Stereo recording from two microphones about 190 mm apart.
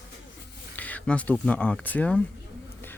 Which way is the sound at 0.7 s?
10° left (ahead or behind).